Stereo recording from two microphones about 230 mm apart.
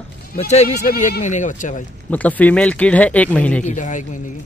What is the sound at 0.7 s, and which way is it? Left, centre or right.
Speech, left.